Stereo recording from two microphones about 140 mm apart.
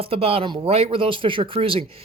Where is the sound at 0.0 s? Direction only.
40° right (ahead or behind).